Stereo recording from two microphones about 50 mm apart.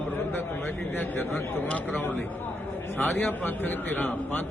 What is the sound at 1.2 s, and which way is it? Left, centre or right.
Speech, left.